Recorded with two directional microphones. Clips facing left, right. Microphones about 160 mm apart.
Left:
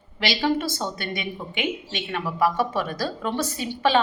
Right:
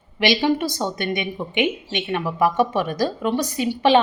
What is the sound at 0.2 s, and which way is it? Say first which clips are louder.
A woman's voice: right 4 dB; 20° right (ahead or behind).